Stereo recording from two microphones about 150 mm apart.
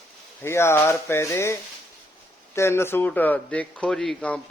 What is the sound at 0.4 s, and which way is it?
Speech, 15° left (ahead or behind).